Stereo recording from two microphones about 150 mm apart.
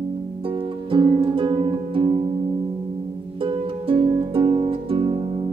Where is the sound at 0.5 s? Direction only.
35° right (ahead or behind).